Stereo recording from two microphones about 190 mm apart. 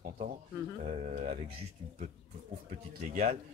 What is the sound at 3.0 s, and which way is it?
Speech, 40° right (ahead or behind).